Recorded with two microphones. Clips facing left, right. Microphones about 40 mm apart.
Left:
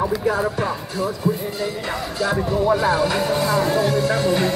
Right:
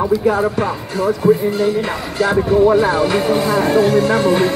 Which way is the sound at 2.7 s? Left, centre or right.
Right.